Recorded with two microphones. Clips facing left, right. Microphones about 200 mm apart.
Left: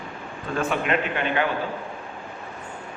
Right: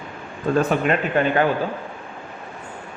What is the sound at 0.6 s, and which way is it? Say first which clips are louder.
Speech: right 4 dB; 40° right (ahead or behind).